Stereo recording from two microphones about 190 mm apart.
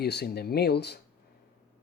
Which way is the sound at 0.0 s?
60° left (ahead or behind).